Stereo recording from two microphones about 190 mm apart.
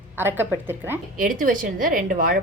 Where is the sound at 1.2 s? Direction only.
45° right (ahead or behind).